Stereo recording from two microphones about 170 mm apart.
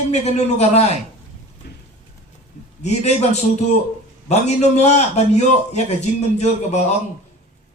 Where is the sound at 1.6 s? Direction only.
70° left (ahead or behind).